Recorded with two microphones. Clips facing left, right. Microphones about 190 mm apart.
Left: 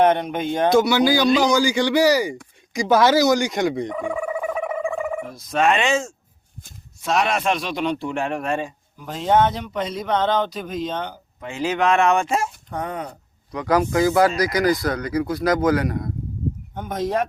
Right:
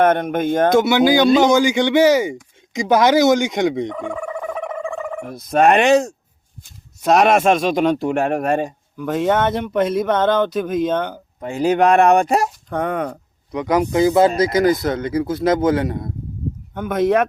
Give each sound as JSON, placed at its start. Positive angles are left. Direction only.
{"t": 0.0, "sound": "a man's voice", "side_deg": -50}
{"t": 0.7, "sound": "speech", "side_deg": -20}
{"t": 3.9, "sound": "a sound", "side_deg": 5}
{"t": 5.2, "sound": "speech", "side_deg": -60}
{"t": 7.0, "sound": "a man's voice", "side_deg": -45}
{"t": 9.0, "sound": "a man's voice", "side_deg": -60}
{"t": 11.9, "sound": "speech", "side_deg": -35}
{"t": 12.7, "sound": "speech", "side_deg": -60}
{"t": 13.5, "sound": "speech", "side_deg": -20}
{"t": 16.7, "sound": "speech", "side_deg": -60}